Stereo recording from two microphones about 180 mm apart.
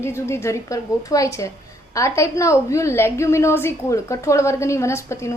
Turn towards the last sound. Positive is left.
turn(degrees=15)  # may be behind; listen again after turning